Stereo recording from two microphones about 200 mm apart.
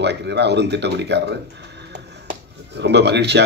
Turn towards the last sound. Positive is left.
turn(degrees=-55)  # may be behind; listen again after turning